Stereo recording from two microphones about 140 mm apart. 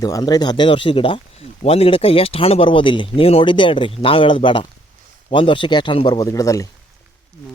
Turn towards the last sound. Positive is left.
turn(degrees=25)  # may be behind; listen again after turning